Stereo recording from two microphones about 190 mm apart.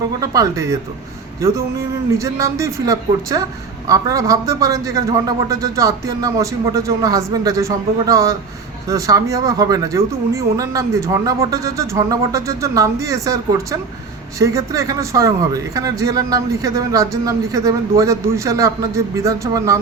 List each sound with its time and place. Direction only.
0.3 s speech: 15° right (ahead or behind)